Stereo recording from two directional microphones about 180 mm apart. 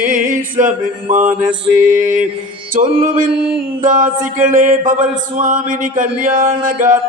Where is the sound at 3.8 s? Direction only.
45° right (ahead or behind).